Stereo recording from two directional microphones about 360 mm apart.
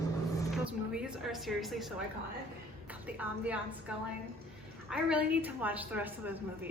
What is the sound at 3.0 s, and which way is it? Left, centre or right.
A woman's voice, centre.